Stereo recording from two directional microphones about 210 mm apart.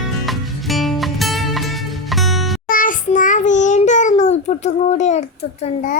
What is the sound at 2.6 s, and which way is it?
Child singing, 40° left (ahead or behind).